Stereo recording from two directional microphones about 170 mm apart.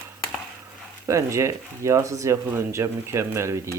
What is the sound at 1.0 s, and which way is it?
Speech, 15° right (ahead or behind).